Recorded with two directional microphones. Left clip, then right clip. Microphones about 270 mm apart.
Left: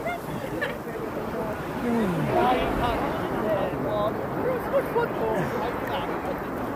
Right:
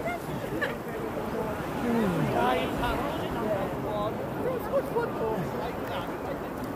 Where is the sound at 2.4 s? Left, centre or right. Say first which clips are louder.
Left 4 dB; right.